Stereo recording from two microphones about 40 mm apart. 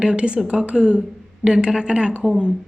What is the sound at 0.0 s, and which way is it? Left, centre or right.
Speech, right.